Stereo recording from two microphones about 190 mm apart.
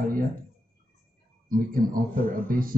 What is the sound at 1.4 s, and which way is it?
A man's voice, 45° right (ahead or behind).